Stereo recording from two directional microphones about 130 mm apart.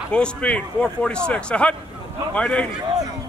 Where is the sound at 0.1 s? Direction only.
10° left (ahead or behind).